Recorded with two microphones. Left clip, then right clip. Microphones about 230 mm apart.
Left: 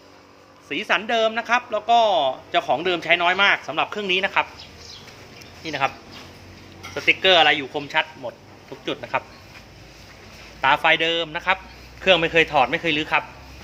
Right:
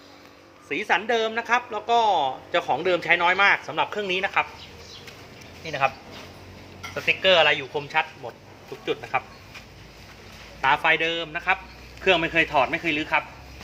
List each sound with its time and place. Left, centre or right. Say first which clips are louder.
0.7 s speech: left 1 dB; centre
5.6 s a man's voice: even; left
6.9 s a man's voice: left 3 dB; left
10.6 s a man's voice: left 3 dB; left